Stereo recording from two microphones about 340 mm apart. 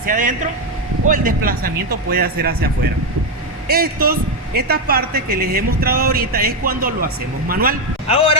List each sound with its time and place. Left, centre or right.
0.0 s a man's voice: right
3.7 s a man's voice: right
8.0 s a man's voice: centre